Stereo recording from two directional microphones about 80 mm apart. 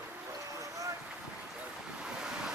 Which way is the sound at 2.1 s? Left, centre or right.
Centre.